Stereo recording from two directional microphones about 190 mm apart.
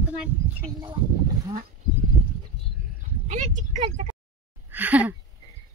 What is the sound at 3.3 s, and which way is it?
Speech, 40° right (ahead or behind).